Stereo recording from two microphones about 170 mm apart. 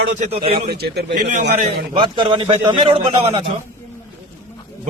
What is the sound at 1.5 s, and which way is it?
Speech, 30° right (ahead or behind).